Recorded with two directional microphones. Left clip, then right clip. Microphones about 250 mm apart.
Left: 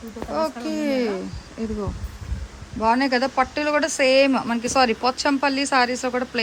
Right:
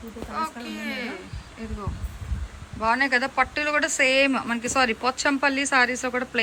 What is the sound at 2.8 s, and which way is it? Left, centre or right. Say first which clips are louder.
Speech: left 2 dB; centre.